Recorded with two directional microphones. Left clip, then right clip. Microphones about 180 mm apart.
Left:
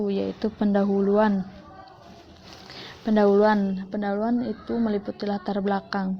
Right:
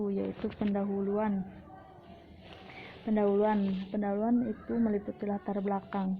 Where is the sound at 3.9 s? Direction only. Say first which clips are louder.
Left 5 dB; 15° left (ahead or behind).